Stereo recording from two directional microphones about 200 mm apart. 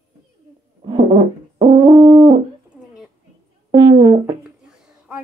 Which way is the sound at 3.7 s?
25° right (ahead or behind).